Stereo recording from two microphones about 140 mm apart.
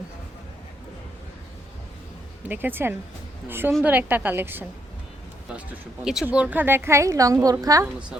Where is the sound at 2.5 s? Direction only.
15° right (ahead or behind).